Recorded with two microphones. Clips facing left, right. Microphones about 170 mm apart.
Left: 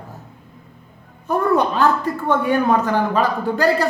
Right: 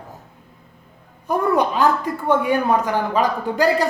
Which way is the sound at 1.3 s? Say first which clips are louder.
Left 1 dB; 15° right (ahead or behind).